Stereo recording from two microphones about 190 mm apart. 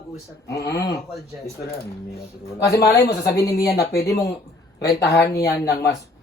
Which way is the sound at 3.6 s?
55° left (ahead or behind).